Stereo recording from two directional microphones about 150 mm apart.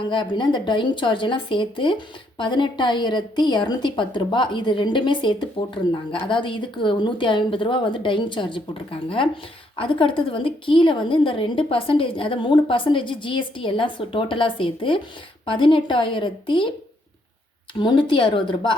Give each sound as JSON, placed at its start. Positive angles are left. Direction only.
{"t": 0.0, "sound": "a woman's voice", "side_deg": 30}
{"t": 17.7, "sound": "a woman's voice", "side_deg": 30}